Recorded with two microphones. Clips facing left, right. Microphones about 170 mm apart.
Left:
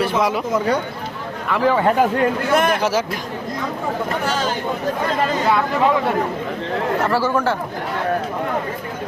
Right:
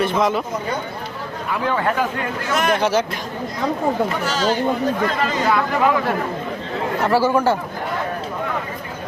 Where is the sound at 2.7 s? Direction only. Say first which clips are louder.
Right 1 dB; 5° left (ahead or behind).